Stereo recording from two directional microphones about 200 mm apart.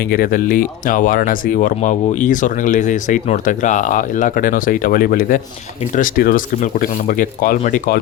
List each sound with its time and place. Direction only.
0.0 s speech: 45° left (ahead or behind)